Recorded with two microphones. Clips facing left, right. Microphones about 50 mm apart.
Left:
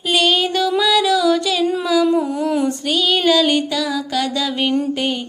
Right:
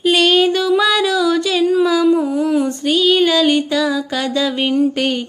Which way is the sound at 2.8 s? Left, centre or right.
Centre.